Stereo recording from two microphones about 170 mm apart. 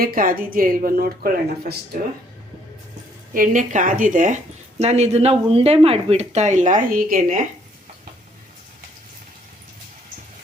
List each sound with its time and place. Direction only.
0.0 s speech: 55° right (ahead or behind)
3.3 s speech: 50° right (ahead or behind)